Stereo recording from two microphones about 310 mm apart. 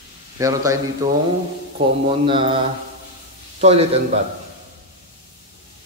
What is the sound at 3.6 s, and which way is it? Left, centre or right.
Speech, centre.